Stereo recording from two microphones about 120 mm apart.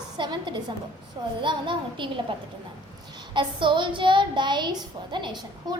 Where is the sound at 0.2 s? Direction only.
40° right (ahead or behind).